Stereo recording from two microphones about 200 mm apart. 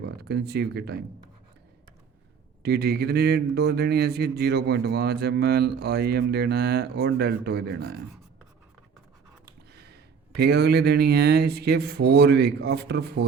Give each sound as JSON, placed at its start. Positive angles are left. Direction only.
{"t": 0.0, "sound": "speech", "side_deg": -55}
{"t": 2.6, "sound": "speech", "side_deg": -55}
{"t": 9.7, "sound": "speech", "side_deg": -55}